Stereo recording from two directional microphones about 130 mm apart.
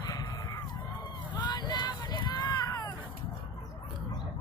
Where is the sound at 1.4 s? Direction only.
35° left (ahead or behind).